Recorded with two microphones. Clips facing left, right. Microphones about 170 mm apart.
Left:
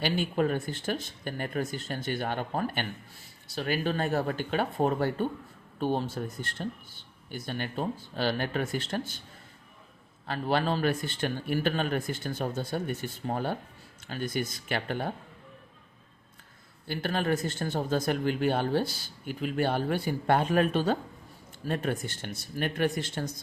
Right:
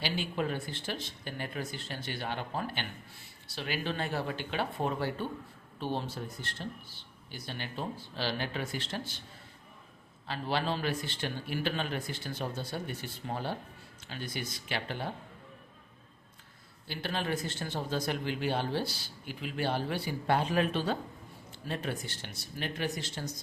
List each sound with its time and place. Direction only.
0.0 s speech: 50° left (ahead or behind)
10.2 s speech: 50° left (ahead or behind)
16.8 s speech: 50° left (ahead or behind)